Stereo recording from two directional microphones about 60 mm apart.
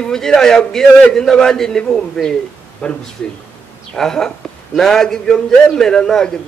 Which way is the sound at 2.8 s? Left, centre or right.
Left.